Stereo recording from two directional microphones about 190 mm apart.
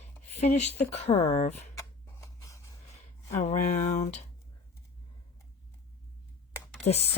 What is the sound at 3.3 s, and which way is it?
Speech, 40° left (ahead or behind).